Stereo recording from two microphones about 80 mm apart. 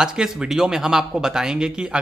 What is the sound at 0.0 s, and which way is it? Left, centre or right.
Speech, centre.